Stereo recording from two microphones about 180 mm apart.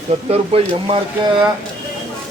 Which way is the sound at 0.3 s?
35° right (ahead or behind).